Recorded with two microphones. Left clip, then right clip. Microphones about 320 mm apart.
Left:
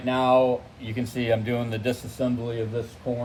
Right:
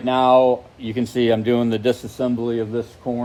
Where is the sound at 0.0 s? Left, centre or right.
Right.